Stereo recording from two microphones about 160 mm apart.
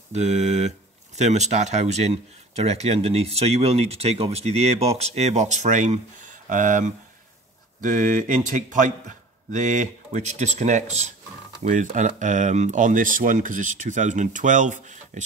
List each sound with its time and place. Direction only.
0.1 s speech: 45° right (ahead or behind)